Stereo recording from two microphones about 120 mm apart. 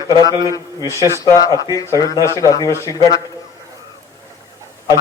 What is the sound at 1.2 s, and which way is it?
Speech, 30° left (ahead or behind).